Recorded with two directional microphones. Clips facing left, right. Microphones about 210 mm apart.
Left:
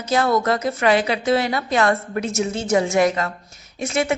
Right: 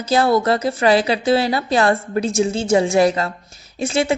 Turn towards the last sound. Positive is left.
turn(degrees=-30)  # may be behind; listen again after turning